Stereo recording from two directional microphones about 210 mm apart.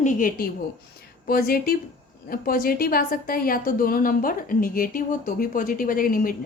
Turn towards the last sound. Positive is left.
turn(degrees=40)  # may be behind; listen again after turning